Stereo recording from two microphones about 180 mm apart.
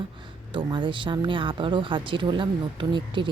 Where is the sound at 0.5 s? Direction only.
25° right (ahead or behind).